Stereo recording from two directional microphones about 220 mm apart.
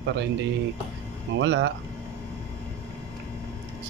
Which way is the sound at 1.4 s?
55° right (ahead or behind).